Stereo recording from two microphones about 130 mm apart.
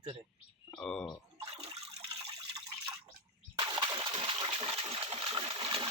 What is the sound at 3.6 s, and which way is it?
Splash, 35° right (ahead or behind).